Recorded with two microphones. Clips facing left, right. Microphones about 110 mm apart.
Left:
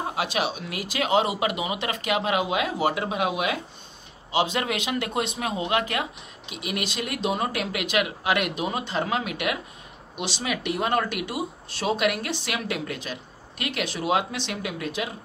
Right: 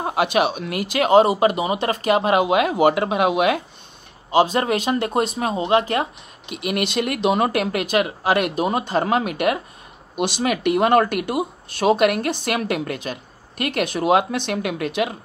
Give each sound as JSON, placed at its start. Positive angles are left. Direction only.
{"t": 0.0, "sound": "speech", "side_deg": -60}
{"t": 4.3, "sound": "speech", "side_deg": -40}
{"t": 6.5, "sound": "speech", "side_deg": -60}